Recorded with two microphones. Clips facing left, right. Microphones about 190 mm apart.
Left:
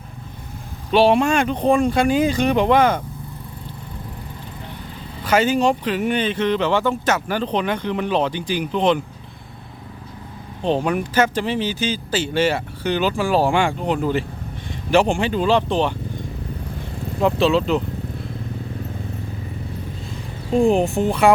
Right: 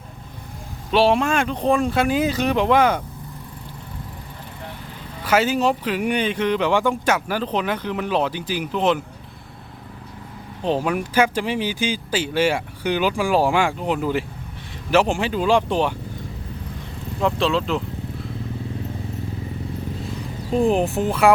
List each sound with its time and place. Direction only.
0.9 s speech: centre (ahead or behind)
5.2 s speech: 5° right (ahead or behind)
10.6 s speech: 5° right (ahead or behind)
17.2 s speech: 5° left (ahead or behind)
20.5 s speech: 5° right (ahead or behind)